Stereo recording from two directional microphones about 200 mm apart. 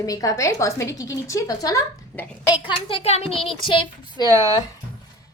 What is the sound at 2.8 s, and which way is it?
A child's voice, 30° left (ahead or behind).